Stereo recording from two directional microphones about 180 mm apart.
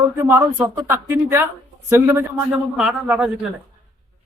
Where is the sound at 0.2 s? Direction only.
15° right (ahead or behind).